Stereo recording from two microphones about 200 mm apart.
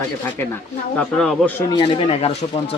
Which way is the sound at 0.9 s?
5° left (ahead or behind).